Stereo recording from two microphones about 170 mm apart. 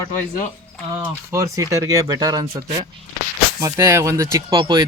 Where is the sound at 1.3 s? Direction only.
20° right (ahead or behind).